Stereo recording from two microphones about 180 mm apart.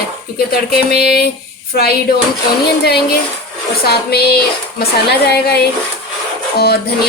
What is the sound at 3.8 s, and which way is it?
A woman's voice, 60° left (ahead or behind).